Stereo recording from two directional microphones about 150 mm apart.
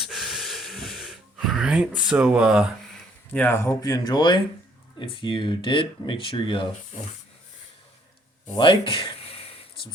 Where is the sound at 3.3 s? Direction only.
15° left (ahead or behind); by 6.6 s 35° left (ahead or behind).